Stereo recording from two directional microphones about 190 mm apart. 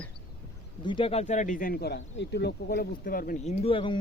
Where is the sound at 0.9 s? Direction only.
30° left (ahead or behind); by 3.3 s 50° left (ahead or behind).